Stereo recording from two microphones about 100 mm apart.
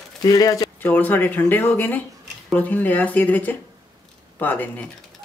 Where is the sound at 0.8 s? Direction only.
20° left (ahead or behind).